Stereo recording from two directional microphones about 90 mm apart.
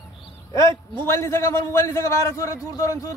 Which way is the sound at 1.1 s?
30° left (ahead or behind).